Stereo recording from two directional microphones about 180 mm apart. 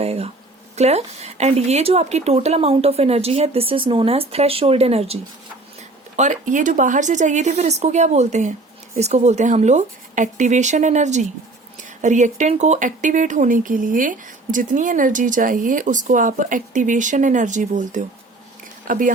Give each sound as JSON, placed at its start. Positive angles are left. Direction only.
{"t": 0.0, "sound": "speech", "side_deg": -35}